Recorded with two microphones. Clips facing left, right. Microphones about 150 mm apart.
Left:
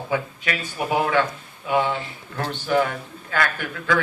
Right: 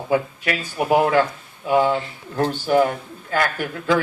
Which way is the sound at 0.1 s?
40° right (ahead or behind).